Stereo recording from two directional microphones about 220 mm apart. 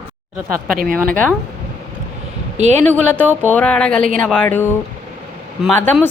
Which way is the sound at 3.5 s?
5° left (ahead or behind).